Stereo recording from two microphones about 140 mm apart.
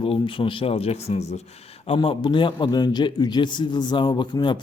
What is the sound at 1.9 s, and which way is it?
A man's voice, 35° left (ahead or behind).